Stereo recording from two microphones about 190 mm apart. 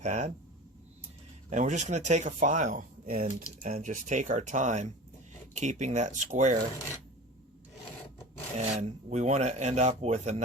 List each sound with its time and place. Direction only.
0.0 s speech: 35° right (ahead or behind)
1.5 s speech: 40° right (ahead or behind)
8.7 s speech: 40° right (ahead or behind)